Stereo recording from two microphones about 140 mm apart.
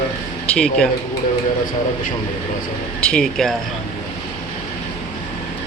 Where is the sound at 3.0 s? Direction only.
5° left (ahead or behind).